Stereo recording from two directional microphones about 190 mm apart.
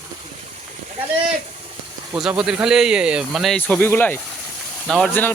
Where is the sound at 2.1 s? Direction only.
5° right (ahead or behind).